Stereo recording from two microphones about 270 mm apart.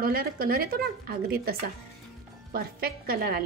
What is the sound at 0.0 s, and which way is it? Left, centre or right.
A woman's voice, right.